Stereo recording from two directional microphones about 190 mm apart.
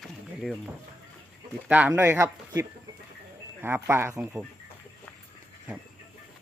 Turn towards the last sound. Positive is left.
turn(degrees=-5)  # may be behind; listen again after turning